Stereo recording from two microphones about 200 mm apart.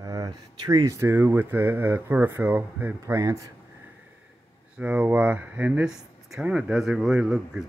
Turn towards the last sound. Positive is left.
turn(degrees=-5)  # may be behind; listen again after turning